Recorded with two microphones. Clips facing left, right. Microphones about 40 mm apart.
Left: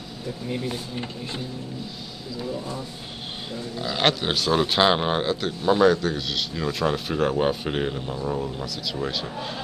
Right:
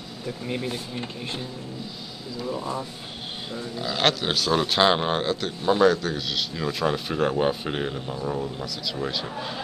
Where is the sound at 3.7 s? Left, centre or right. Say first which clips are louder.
Left 1 dB; centre.